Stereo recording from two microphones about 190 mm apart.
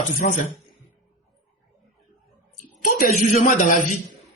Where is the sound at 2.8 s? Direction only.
40° left (ahead or behind).